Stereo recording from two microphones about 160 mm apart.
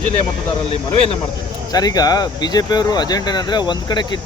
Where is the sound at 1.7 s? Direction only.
25° left (ahead or behind).